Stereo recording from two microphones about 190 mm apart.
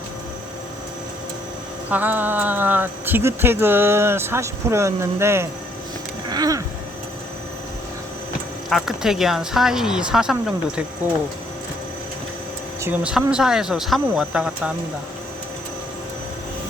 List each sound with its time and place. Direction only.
1.9 s speech: 10° right (ahead or behind)
6.2 s a sound: 20° right (ahead or behind)
8.7 s speech: centre (ahead or behind)
12.8 s speech: 5° right (ahead or behind)